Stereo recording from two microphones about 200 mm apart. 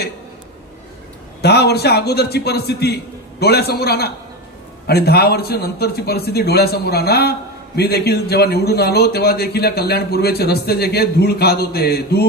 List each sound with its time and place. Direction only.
1.4 s a man's voice: 55° left (ahead or behind)